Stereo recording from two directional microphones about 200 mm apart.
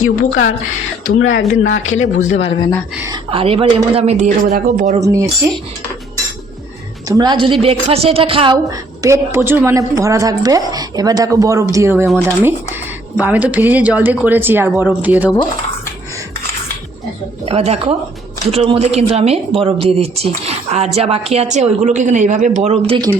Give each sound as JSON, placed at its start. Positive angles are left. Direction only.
{"t": 0.0, "sound": "speech", "side_deg": 90}
{"t": 1.2, "sound": "speech", "side_deg": 75}
{"t": 2.2, "sound": "speech", "side_deg": 30}
{"t": 3.0, "sound": "speech", "side_deg": -25}
{"t": 4.9, "sound": "a woman's voice", "side_deg": -15}
{"t": 7.1, "sound": "speech", "side_deg": -20}
{"t": 9.0, "sound": "a woman's voice", "side_deg": -15}
{"t": 17.4, "sound": "speech", "side_deg": -30}